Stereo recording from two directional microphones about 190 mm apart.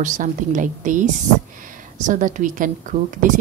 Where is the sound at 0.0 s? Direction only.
40° right (ahead or behind).